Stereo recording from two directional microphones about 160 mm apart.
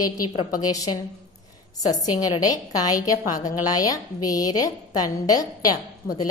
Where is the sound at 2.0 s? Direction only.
25° left (ahead or behind).